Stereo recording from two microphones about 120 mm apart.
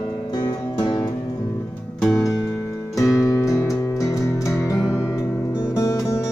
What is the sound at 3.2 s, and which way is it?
Music, 30° left (ahead or behind).